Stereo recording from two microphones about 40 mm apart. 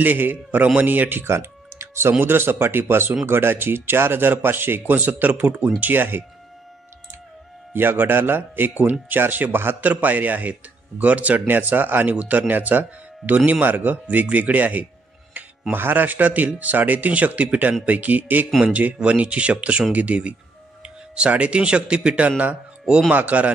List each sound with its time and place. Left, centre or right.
0.0 s speech: right
1.2 s tick-tock: right
2.2 s speech: right
4.9 s speech: right
5.8 s speech: right
7.7 s speech: right
9.8 s speech: right
11.4 s speech: right
12.2 s speech: right
14.0 s speech: right
15.3 s music: right
15.7 s speech: right
23.1 s speech: right